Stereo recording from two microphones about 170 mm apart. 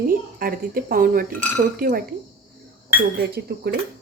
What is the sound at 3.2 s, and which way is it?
Speech, 65° right (ahead or behind).